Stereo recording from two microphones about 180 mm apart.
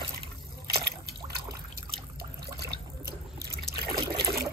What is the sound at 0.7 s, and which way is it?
Liquid, 60° right (ahead or behind).